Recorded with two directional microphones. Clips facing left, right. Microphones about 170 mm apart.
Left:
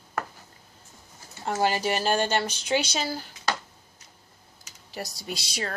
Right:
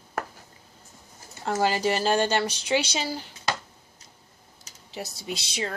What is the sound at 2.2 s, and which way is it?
Speech, 30° right (ahead or behind).